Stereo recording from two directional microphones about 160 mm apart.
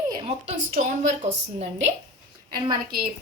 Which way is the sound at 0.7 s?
50° right (ahead or behind).